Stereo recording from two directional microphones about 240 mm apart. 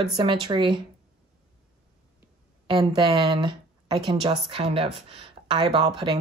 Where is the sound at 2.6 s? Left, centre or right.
Right.